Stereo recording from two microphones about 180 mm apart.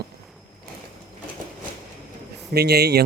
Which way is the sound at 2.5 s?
65° right (ahead or behind).